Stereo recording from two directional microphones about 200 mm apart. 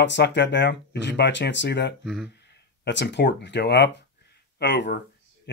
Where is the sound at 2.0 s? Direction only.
Centre (ahead or behind).